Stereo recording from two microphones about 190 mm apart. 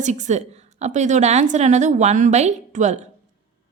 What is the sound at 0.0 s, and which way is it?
A woman's voice, 40° right (ahead or behind).